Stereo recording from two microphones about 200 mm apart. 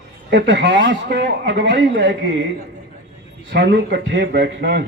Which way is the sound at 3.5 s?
60° right (ahead or behind).